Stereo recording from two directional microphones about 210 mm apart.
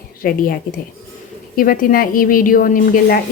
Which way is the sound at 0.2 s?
45° left (ahead or behind).